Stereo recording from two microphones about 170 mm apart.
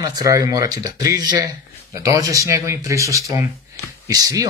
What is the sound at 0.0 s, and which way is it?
Speech, 20° right (ahead or behind).